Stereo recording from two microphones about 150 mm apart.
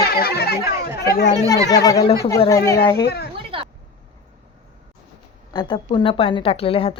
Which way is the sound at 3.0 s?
90° left.